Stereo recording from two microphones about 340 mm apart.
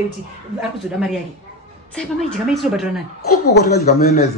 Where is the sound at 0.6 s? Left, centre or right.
Centre.